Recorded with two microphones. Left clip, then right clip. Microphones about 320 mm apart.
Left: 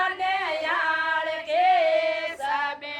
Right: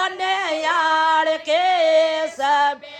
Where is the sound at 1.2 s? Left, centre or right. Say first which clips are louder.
Right 4 dB; right.